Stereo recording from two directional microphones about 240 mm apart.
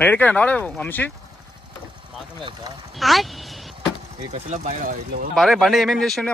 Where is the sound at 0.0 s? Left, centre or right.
Centre.